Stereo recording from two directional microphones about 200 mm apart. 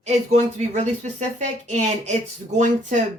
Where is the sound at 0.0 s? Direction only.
35° right (ahead or behind).